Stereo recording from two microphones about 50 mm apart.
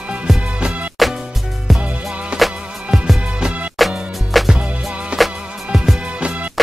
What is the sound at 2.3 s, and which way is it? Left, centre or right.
Music, centre.